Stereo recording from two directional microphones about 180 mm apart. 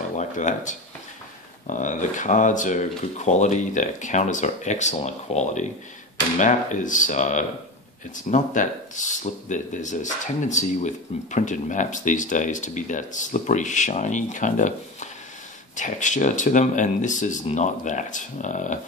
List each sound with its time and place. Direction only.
0.2 s speech: 45° left (ahead or behind)